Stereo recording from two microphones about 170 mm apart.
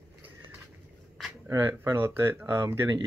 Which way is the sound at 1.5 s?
15° right (ahead or behind).